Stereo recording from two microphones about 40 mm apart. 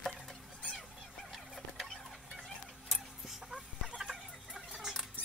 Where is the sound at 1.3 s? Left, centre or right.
Centre.